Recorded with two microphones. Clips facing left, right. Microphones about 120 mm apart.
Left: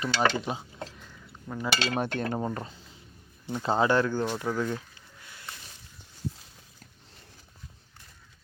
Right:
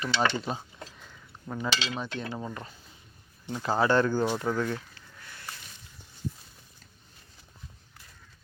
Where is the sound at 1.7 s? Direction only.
55° left (ahead or behind).